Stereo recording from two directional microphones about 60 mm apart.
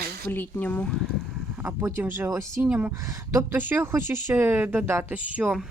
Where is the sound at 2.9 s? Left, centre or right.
Right.